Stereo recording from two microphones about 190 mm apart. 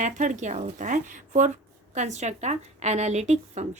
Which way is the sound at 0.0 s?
40° right (ahead or behind).